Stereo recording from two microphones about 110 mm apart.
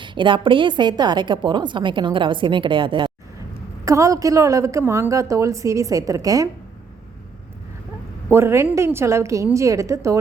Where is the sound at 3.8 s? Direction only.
30° right (ahead or behind).